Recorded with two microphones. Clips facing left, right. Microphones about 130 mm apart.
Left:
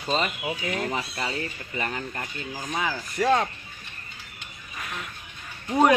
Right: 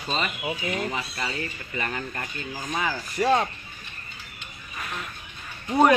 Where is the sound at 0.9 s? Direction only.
30° left (ahead or behind).